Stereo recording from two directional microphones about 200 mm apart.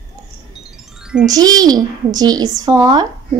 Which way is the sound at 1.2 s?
20° right (ahead or behind).